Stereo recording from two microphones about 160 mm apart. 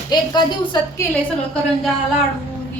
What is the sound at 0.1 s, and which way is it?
Speech, 25° left (ahead or behind).